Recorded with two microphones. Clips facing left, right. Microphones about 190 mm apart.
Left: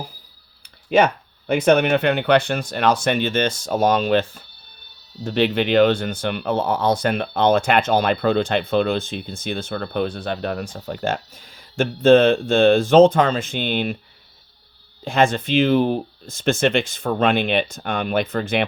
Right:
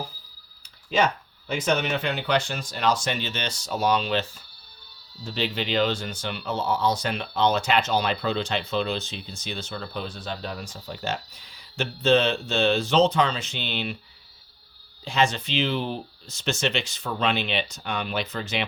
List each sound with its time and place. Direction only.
0.9 s speech: 60° left (ahead or behind)
15.0 s speech: 55° left (ahead or behind)